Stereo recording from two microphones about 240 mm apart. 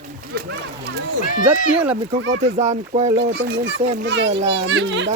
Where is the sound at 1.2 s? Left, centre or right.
Left.